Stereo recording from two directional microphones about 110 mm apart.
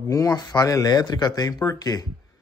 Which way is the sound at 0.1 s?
35° left (ahead or behind).